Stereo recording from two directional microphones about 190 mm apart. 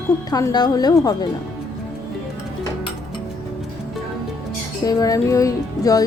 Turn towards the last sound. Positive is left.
turn(degrees=15)  # may be behind; listen again after turning